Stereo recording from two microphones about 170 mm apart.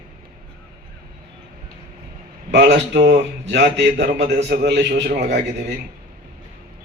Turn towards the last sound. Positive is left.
turn(degrees=-80)